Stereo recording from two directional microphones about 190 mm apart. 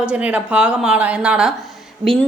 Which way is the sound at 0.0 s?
5° right (ahead or behind).